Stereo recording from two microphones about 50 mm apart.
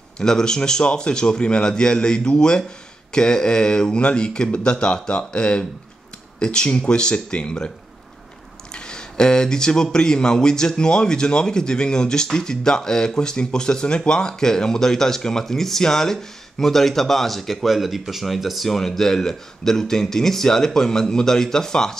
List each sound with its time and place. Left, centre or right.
0.2 s speech: centre
8.7 s speech: centre